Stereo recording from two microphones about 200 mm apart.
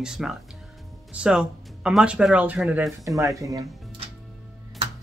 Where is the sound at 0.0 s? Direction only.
5° right (ahead or behind).